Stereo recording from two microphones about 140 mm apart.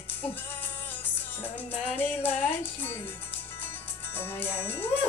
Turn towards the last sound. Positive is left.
turn(degrees=15)  # may be behind; listen again after turning